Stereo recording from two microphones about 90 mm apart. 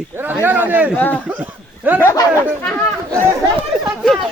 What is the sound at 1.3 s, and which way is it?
Speech, 20° right (ahead or behind).